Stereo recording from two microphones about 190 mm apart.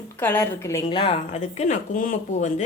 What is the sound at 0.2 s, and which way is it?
A woman's voice, 10° left (ahead or behind).